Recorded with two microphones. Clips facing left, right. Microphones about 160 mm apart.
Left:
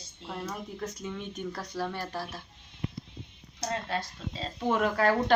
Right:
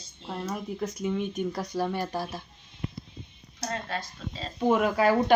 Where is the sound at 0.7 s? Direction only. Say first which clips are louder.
Right 7 dB; 10° right (ahead or behind).